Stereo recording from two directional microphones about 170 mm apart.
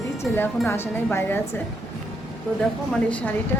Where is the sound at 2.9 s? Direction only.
10° left (ahead or behind).